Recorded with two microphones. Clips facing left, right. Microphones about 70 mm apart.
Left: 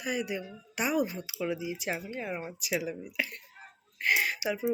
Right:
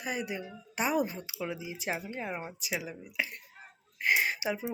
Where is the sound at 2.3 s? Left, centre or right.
Centre.